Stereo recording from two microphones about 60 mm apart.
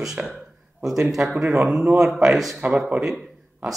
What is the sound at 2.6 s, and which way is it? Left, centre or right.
Speech, right.